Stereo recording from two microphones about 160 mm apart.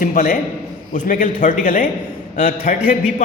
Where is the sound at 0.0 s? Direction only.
50° left (ahead or behind).